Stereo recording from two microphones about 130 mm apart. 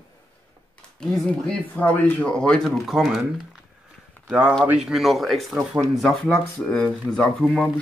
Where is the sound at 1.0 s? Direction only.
5° left (ahead or behind).